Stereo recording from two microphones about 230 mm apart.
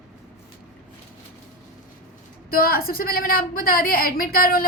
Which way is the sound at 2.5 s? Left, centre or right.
Left.